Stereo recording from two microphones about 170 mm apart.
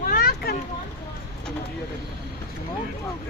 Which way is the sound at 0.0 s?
60° left (ahead or behind).